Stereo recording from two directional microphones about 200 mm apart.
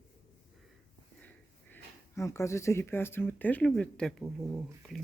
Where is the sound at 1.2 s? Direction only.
10° left (ahead or behind).